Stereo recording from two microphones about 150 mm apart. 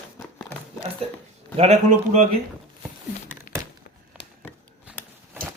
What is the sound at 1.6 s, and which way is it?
Speech, 50° right (ahead or behind).